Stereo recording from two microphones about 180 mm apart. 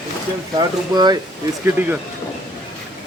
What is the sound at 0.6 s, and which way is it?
Speech, 25° right (ahead or behind).